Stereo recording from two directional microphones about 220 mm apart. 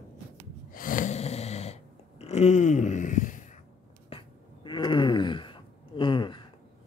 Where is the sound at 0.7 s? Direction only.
40° left (ahead or behind).